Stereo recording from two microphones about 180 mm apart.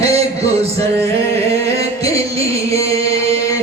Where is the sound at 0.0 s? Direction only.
35° right (ahead or behind).